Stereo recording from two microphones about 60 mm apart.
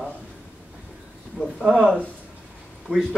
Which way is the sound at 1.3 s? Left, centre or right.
Centre.